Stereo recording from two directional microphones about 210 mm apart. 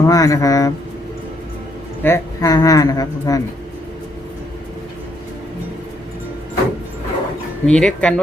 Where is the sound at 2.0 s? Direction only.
15° left (ahead or behind).